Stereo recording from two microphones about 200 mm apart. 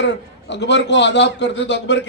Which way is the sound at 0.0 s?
60° left (ahead or behind).